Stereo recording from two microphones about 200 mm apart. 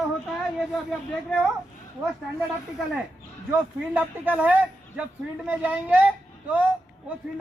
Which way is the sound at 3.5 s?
10° right (ahead or behind).